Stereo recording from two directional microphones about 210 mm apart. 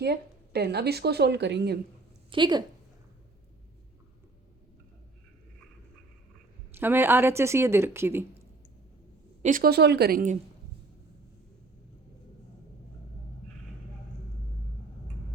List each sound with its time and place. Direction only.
0.0 s a woman's voice: 50° right (ahead or behind)
2.3 s a woman's voice: 20° right (ahead or behind)
6.7 s a woman's voice: 10° right (ahead or behind)
9.4 s a woman's voice: 40° right (ahead or behind)